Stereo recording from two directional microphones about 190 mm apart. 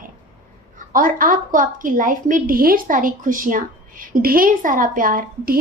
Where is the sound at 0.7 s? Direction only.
45° right (ahead or behind).